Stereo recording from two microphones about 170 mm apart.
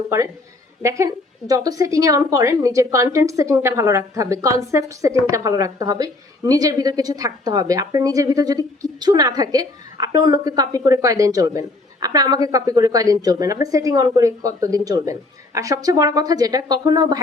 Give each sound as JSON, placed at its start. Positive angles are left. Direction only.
{"t": 0.8, "sound": "a woman's voice", "side_deg": -15}